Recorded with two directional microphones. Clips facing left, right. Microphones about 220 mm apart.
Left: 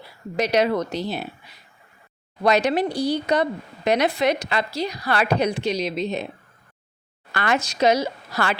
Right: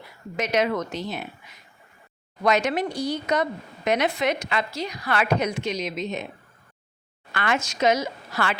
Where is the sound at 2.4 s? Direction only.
35° left (ahead or behind).